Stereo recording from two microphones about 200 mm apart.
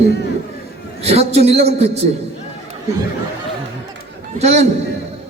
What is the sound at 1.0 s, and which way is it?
Speech, 30° right (ahead or behind).